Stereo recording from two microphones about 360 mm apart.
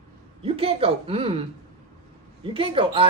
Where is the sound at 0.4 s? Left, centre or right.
Centre.